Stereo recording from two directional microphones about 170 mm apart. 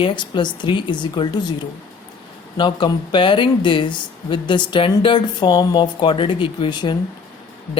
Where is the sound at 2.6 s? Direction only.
30° left (ahead or behind).